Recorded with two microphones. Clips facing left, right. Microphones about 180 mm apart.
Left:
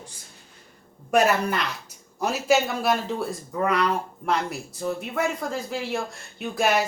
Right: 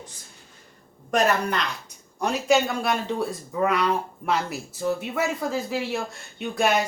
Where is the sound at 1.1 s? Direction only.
5° left (ahead or behind).